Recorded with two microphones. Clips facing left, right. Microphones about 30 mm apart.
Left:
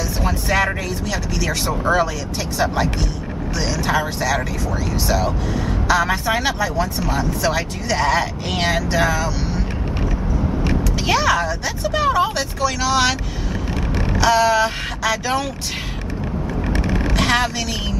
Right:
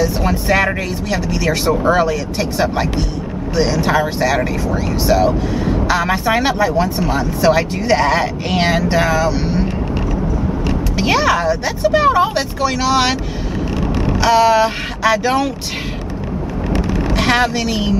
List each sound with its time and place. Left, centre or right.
0.0 s speech: centre
11.0 s speech: centre
14.2 s speech: centre
16.8 s vehicle: left
17.1 s a woman's voice: centre